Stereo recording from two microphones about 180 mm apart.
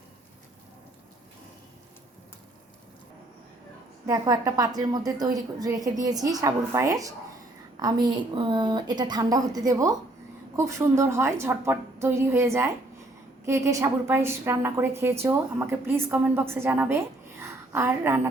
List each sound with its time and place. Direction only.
4.0 s a woman's voice: 20° right (ahead or behind)